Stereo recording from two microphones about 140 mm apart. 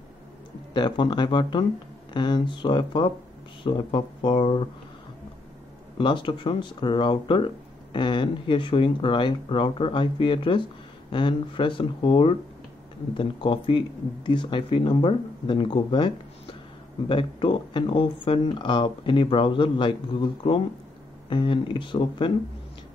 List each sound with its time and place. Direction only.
0.7 s speech: 35° left (ahead or behind)
5.9 s speech: 35° left (ahead or behind)